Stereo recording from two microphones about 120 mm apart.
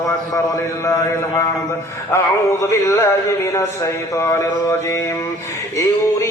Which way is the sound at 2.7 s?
25° left (ahead or behind).